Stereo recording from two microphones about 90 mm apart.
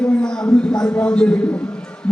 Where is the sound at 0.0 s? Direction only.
10° left (ahead or behind).